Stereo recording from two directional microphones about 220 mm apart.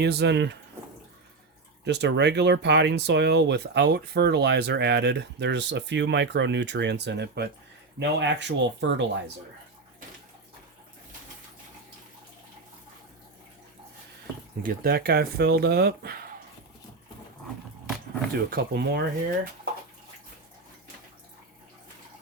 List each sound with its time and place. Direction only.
0.0 s speech: 50° right (ahead or behind)
1.8 s speech: 50° right (ahead or behind)
14.6 s speech: 40° right (ahead or behind)
18.3 s speech: 45° right (ahead or behind)